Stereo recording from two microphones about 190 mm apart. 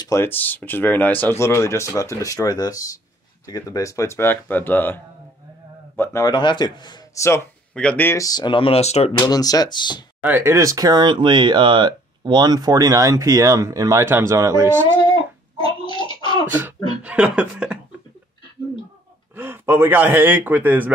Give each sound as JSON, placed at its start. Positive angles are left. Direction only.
{"t": 0.0, "sound": "a man's voice", "side_deg": 15}
{"t": 9.2, "sound": "speech", "side_deg": 20}
{"t": 10.2, "sound": "speech", "side_deg": -10}
{"t": 15.0, "sound": "a sound", "side_deg": 25}
{"t": 17.0, "sound": "chuckle", "side_deg": -5}
{"t": 19.3, "sound": "speech", "side_deg": -10}